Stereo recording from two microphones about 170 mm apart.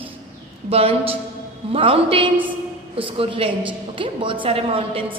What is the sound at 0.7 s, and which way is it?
A woman's voice, 35° right (ahead or behind).